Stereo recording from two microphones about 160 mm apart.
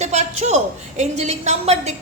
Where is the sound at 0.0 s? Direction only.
45° right (ahead or behind).